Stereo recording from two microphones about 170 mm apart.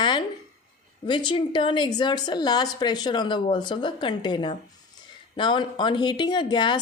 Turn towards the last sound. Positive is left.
turn(degrees=25)  # may be behind; listen again after turning